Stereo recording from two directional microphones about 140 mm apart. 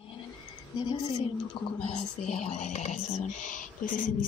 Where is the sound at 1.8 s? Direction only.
55° left (ahead or behind).